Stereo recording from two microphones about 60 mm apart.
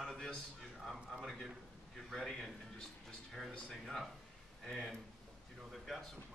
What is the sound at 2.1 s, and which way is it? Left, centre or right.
Speech, centre.